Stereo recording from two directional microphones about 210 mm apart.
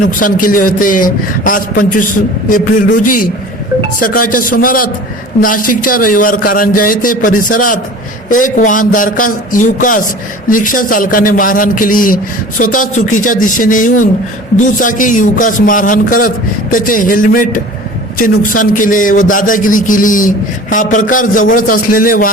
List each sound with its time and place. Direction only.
0.2 s a man's voice: 40° left (ahead or behind)